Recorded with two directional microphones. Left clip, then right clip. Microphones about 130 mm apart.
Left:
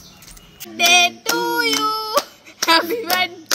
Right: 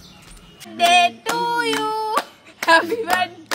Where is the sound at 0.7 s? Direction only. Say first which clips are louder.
Left 1 dB; 20° right (ahead or behind).